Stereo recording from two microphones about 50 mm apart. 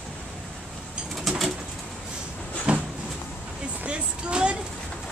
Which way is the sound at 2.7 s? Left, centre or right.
Right.